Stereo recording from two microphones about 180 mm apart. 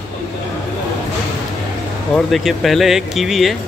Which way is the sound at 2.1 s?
Centre (ahead or behind).